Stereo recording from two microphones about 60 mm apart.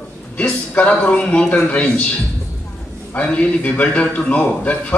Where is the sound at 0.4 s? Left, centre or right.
Left.